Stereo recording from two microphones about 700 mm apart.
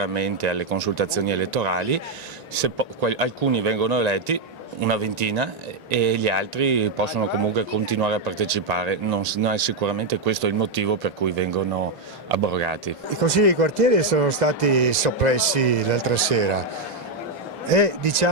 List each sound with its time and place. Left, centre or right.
0.0 s speech: right
17.7 s speech: right